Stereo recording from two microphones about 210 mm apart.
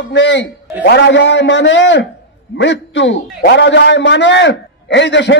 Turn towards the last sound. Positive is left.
turn(degrees=60)  # may be behind; listen again after turning